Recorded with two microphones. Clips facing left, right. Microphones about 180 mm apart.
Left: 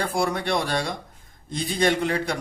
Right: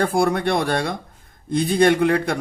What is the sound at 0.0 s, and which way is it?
A man's voice, 55° right (ahead or behind).